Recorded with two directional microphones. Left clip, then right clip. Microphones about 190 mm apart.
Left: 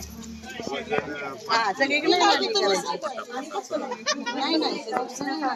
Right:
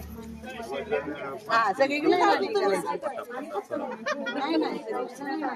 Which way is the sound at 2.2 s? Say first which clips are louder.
Left 2 dB; 45° left (ahead or behind).